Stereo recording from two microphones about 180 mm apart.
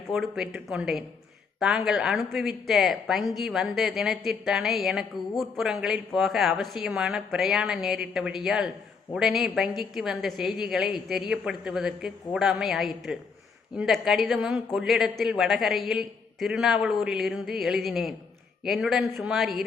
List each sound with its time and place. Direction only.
0.1 s a woman's voice: centre (ahead or behind)